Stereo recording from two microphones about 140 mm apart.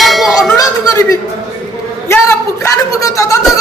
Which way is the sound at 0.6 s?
25° left (ahead or behind).